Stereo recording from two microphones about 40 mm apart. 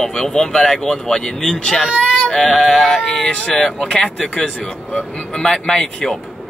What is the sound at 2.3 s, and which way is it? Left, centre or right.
Sheep, centre.